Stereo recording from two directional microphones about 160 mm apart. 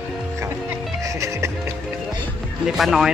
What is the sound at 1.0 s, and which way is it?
Music, 20° right (ahead or behind).